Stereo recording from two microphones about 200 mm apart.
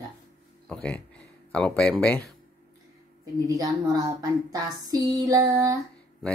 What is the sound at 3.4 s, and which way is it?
Speech, 15° right (ahead or behind).